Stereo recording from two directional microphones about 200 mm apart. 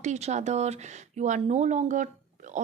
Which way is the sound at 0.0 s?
35° right (ahead or behind).